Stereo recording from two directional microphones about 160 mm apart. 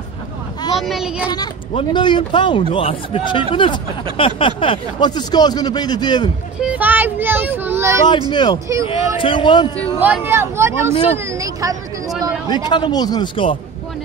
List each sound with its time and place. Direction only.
0.7 s a child's voice: centre (ahead or behind)
1.7 s speech: 35° left (ahead or behind)
6.6 s speech: 10° right (ahead or behind)
8.3 s speech: 30° left (ahead or behind)
9.9 s speech: 10° right (ahead or behind)
12.4 s speech: 30° left (ahead or behind)